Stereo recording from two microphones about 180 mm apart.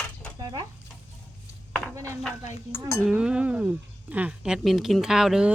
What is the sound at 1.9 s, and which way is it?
Speech, 15° right (ahead or behind).